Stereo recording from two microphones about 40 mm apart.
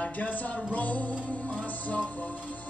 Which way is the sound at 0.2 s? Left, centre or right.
Left.